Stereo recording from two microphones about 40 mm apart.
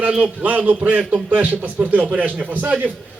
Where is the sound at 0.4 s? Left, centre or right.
Right.